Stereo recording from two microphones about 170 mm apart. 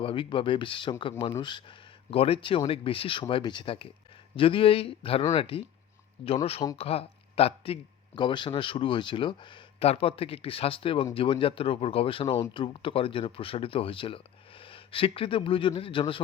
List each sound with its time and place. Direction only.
0.0 s speech: 30° left (ahead or behind)